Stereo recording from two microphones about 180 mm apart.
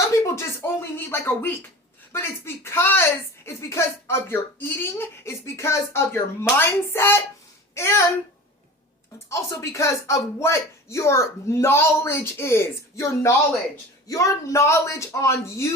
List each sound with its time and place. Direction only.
0.0 s speech: 15° left (ahead or behind)
9.1 s speech: 15° left (ahead or behind)